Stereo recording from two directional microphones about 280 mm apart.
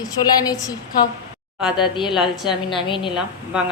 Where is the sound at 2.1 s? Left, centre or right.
Centre.